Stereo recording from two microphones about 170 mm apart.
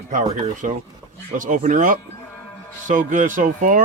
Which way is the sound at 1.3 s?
50° right (ahead or behind).